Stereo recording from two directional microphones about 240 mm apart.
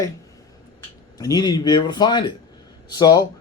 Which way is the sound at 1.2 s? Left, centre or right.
Centre.